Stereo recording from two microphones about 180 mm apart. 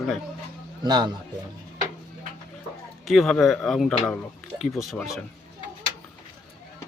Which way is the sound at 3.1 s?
Centre (ahead or behind).